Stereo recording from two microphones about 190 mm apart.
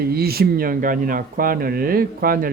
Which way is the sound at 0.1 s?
55° right (ahead or behind).